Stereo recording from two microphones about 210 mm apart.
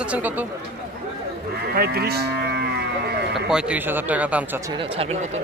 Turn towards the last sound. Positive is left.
turn(degrees=-5)  # may be behind; listen again after turning